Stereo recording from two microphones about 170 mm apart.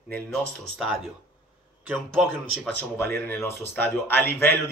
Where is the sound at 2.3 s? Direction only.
10° left (ahead or behind).